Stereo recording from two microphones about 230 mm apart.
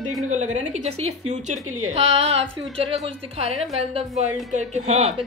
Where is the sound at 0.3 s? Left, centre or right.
Right.